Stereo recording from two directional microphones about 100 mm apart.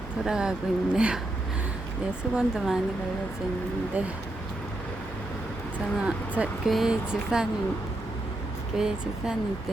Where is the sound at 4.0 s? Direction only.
15° right (ahead or behind).